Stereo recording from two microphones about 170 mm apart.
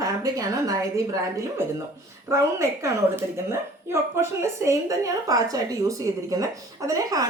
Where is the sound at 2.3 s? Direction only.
15° right (ahead or behind).